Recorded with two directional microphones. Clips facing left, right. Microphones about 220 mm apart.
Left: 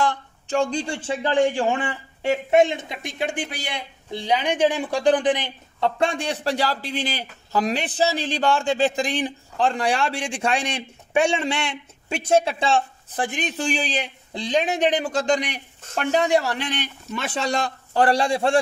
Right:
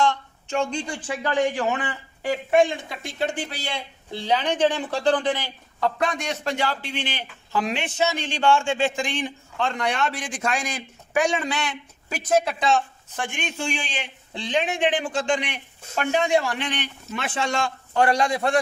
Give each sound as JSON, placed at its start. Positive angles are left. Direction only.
{"t": 0.0, "sound": "a man's voice", "side_deg": 35}